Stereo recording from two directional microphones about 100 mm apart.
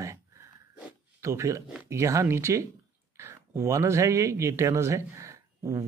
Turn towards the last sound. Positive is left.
turn(degrees=-30)  # may be behind; listen again after turning